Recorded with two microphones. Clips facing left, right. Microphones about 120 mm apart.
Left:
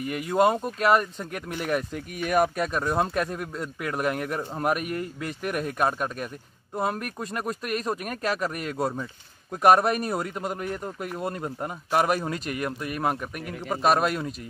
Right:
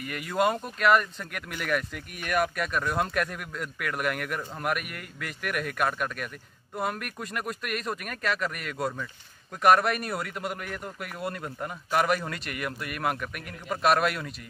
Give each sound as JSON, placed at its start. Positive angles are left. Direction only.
{"t": 0.7, "sound": "speech", "side_deg": 35}